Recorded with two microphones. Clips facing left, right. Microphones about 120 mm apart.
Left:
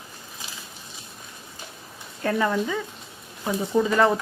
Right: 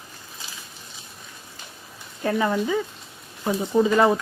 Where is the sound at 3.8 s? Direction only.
15° right (ahead or behind).